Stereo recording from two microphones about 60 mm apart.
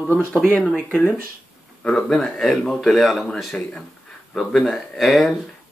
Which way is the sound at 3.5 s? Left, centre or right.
Centre.